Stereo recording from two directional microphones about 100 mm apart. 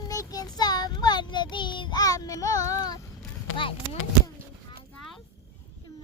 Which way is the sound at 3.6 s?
65° left (ahead or behind).